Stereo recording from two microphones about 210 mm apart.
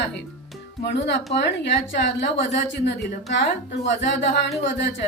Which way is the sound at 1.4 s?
55° left (ahead or behind).